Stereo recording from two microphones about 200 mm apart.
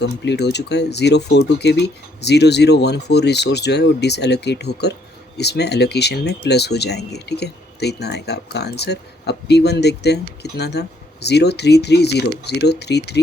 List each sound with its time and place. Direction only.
0.0 s speech: 60° left (ahead or behind)